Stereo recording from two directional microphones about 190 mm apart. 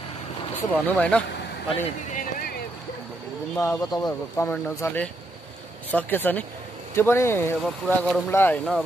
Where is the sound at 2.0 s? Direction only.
45° left (ahead or behind).